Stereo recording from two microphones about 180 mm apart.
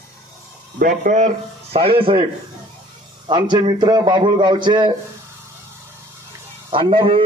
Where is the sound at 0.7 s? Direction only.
50° right (ahead or behind); by 2.2 s 30° right (ahead or behind).